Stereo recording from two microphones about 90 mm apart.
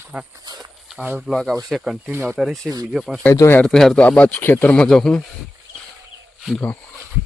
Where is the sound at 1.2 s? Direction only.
Centre (ahead or behind).